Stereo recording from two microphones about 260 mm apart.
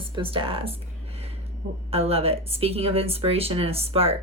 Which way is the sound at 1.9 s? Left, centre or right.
Right.